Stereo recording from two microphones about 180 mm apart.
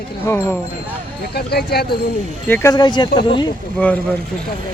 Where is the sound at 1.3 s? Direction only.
60° left (ahead or behind).